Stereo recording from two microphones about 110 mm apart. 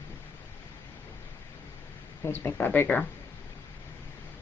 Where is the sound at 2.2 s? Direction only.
25° left (ahead or behind).